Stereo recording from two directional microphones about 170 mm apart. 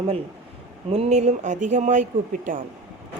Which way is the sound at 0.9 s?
35° right (ahead or behind).